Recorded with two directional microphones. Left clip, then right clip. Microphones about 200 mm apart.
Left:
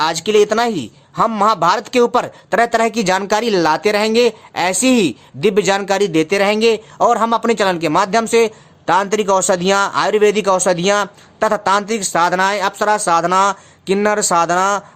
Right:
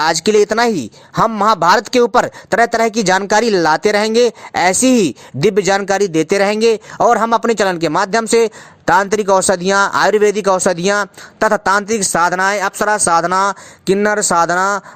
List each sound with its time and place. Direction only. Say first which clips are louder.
0.0 s speech: right 1 dB; 35° right (ahead or behind)